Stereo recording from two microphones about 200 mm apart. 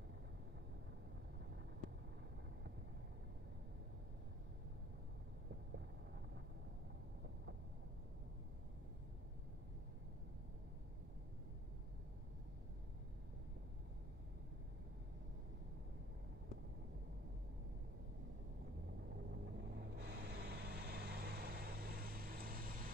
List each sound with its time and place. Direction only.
19.5 s vehicle: 55° right (ahead or behind)